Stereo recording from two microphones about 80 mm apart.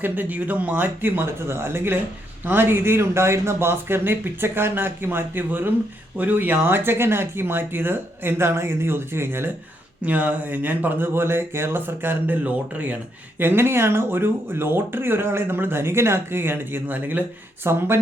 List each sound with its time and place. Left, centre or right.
0.0 s speech: right